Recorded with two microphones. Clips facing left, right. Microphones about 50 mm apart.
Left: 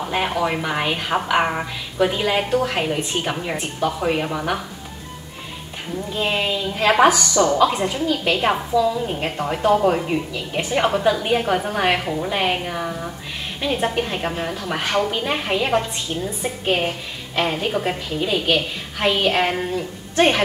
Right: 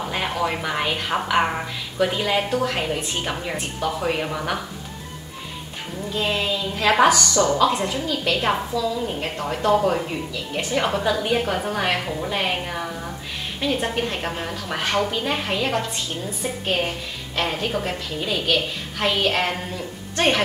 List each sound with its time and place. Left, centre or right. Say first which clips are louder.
0.1 s a woman's voice: left 4 dB; centre
6.1 s a woman's voice: left 1 dB; centre
10.0 s a woman's voice: left 4 dB; centre